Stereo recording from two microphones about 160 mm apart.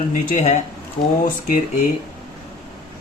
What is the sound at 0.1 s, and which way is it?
Speech, 50° left (ahead or behind).